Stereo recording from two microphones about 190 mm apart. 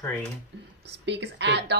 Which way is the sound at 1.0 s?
65° right (ahead or behind).